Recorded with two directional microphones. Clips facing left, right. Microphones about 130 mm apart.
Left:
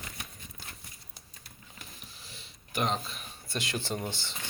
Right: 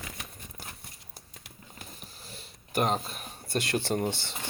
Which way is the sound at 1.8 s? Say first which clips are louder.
Right 3 dB; 45° right (ahead or behind).